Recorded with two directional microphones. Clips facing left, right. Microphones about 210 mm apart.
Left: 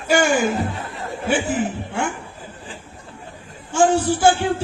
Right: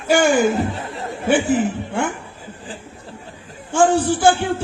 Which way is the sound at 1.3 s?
55° right (ahead or behind).